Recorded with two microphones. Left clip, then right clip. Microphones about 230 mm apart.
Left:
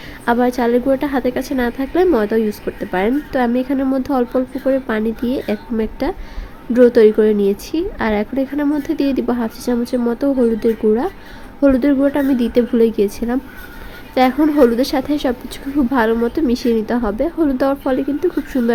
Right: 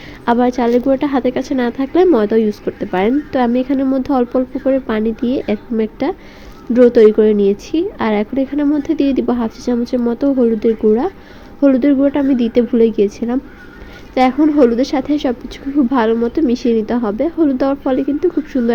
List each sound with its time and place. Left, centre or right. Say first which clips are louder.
0.3 s a woman's voice: right 2 dB; centre